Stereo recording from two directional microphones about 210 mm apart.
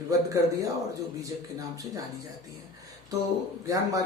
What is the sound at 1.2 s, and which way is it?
Speech, 15° right (ahead or behind).